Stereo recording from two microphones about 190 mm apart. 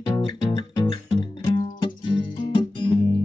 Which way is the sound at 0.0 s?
25° left (ahead or behind).